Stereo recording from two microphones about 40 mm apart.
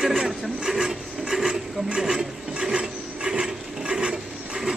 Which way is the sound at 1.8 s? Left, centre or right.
Centre.